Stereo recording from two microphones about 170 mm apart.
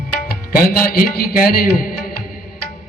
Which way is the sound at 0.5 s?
60° left (ahead or behind).